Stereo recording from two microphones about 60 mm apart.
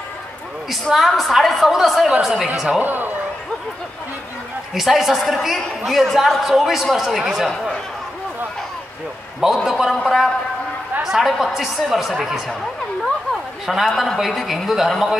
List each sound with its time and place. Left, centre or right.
0.9 s a woman's voice: centre
2.8 s speech: right
4.7 s a woman's voice: centre
9.6 s a woman's voice: centre
13.3 s chatter: centre
14.1 s a woman's voice: centre